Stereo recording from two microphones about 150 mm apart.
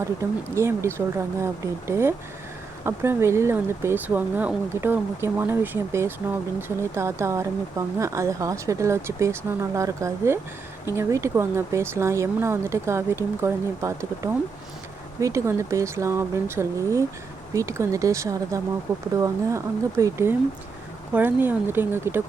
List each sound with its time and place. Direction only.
0.0 s speech: 20° right (ahead or behind)